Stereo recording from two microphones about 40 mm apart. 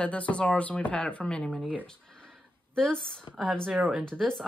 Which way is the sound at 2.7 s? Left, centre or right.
Centre.